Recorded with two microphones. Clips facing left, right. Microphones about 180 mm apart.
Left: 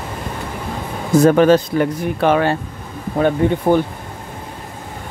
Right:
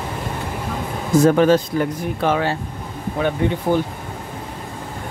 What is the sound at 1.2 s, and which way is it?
Speech, 65° left (ahead or behind).